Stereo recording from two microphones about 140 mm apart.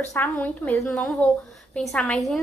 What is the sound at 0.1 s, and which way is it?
A woman's voice, 10° left (ahead or behind).